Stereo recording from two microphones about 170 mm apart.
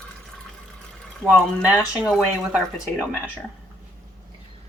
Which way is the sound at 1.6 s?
5° right (ahead or behind).